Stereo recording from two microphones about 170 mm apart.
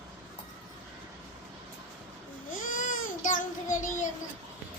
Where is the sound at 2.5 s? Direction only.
50° left (ahead or behind).